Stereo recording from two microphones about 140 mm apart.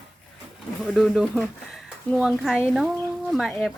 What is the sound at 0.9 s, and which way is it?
Speech, centre (ahead or behind).